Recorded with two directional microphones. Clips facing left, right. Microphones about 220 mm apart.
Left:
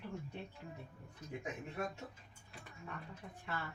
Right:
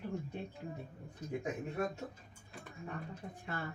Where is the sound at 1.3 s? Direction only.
35° right (ahead or behind).